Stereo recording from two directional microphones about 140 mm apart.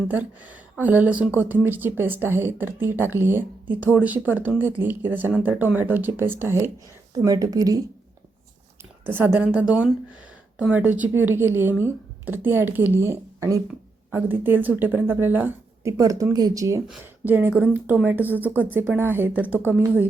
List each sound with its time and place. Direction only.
0.1 s speech: 10° right (ahead or behind)
9.0 s speech: 15° right (ahead or behind)